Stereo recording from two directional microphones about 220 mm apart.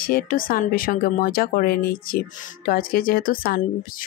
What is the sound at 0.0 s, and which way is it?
Speech, 40° left (ahead or behind).